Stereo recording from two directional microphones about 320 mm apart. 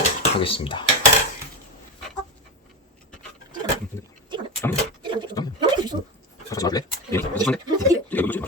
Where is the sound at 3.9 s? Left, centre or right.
Centre.